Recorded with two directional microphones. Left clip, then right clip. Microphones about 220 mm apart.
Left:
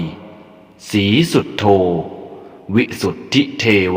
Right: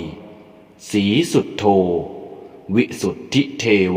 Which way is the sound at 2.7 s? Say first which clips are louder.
Left 2 dB; 20° left (ahead or behind).